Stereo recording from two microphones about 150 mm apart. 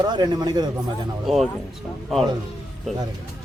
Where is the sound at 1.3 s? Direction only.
Centre (ahead or behind).